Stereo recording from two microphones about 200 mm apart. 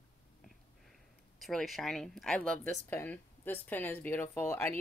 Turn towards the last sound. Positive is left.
turn(degrees=10)  # may be behind; listen again after turning